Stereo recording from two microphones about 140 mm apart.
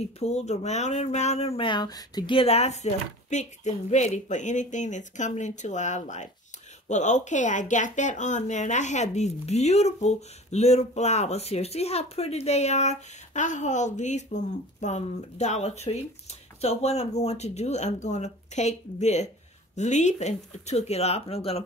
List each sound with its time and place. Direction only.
0.0 s speech: 50° left (ahead or behind)